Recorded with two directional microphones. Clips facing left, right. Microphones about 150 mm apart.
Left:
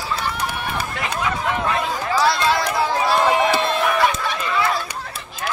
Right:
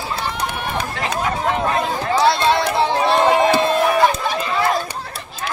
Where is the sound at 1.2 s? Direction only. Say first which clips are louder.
Right 2 dB; 40° right (ahead or behind).